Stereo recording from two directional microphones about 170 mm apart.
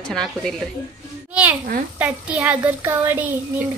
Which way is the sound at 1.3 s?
10° right (ahead or behind).